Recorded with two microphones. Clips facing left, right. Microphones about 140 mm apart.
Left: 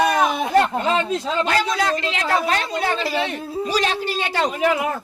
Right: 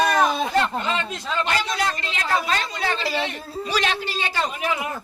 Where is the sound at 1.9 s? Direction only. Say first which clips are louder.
Left 4 dB; 90° left; by 3.1 s 50° left (ahead or behind).